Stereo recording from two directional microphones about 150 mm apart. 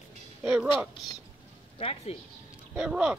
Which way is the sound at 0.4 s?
10° right (ahead or behind).